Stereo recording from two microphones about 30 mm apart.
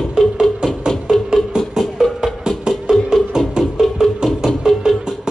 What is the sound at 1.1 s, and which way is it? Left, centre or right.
Music, centre.